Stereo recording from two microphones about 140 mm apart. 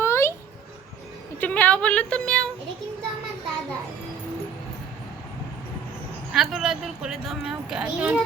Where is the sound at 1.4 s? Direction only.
10° left (ahead or behind).